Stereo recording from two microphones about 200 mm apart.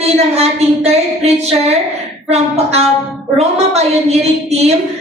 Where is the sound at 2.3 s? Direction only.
30° right (ahead or behind).